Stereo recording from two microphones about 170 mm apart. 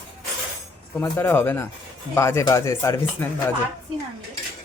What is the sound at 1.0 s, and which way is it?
Speech, 15° left (ahead or behind).